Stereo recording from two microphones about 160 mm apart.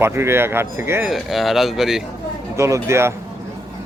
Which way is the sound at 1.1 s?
Centre (ahead or behind).